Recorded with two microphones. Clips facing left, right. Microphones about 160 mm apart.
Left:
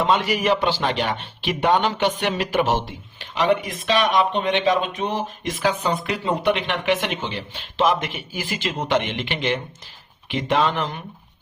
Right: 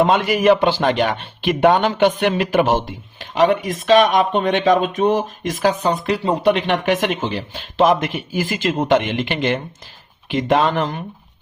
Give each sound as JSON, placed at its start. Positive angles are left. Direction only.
{"t": 0.0, "sound": "a man's voice", "side_deg": -50}